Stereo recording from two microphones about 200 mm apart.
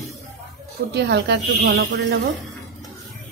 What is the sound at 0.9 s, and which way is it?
A woman's voice, 55° right (ahead or behind).